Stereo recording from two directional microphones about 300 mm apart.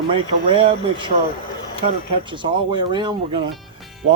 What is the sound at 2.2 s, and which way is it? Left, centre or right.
Speech, centre.